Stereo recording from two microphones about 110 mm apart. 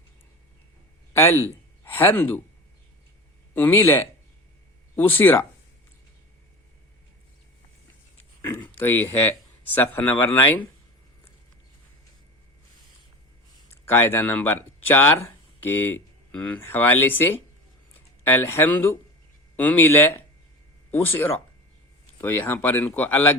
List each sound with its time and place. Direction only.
1.1 s speech: 20° left (ahead or behind)
3.5 s speech: 15° left (ahead or behind)
8.5 s speech: 20° left (ahead or behind)
13.8 s speech: 20° left (ahead or behind)
18.4 s speech: 20° left (ahead or behind)